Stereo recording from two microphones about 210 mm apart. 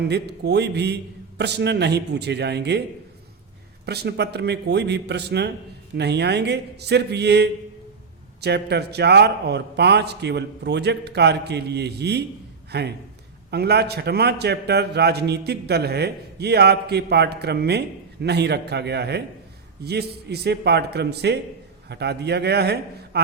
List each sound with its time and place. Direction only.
0.0 s a man's voice: 50° right (ahead or behind)
3.8 s a man's voice: 50° right (ahead or behind)